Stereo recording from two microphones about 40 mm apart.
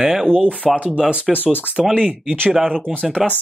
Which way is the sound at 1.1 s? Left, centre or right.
Right.